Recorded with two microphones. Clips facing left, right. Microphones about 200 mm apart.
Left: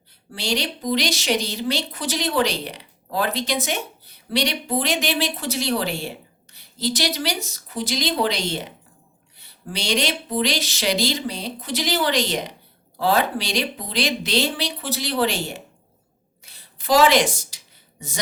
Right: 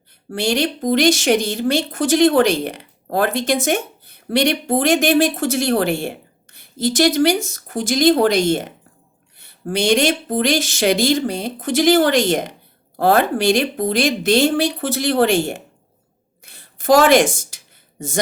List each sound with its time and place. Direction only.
0.3 s a woman's voice: 50° right (ahead or behind)